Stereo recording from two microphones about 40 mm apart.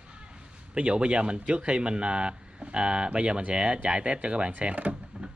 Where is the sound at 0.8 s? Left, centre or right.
Right.